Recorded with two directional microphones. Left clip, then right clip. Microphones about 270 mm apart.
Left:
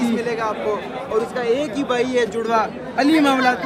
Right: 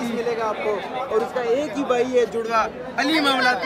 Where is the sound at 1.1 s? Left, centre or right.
Left.